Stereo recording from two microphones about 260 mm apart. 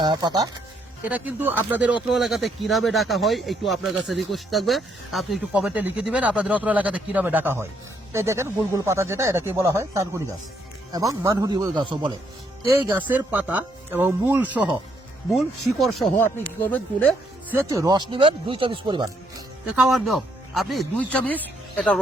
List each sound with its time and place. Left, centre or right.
0.0 s speech: centre
1.0 s speech: centre
17.5 s speech: centre
19.7 s speech: centre